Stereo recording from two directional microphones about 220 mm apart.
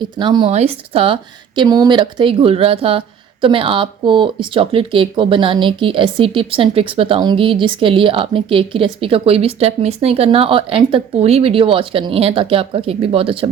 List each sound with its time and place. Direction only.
0.2 s speech: 20° right (ahead or behind)